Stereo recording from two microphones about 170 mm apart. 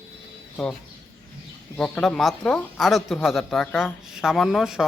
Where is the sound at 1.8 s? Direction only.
5° left (ahead or behind).